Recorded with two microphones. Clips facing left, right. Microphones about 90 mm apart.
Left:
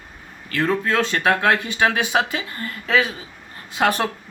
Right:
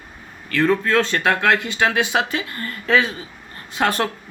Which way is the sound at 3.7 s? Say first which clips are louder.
Even; 10° left (ahead or behind).